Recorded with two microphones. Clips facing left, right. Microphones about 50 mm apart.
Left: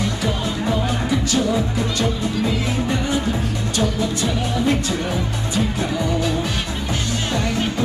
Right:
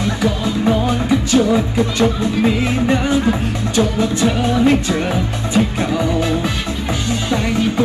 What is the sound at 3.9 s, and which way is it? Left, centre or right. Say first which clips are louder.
Music: right 5 dB; right.